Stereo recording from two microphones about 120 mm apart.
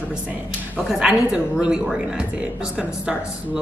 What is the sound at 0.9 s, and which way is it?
A woman's voice, 5° right (ahead or behind).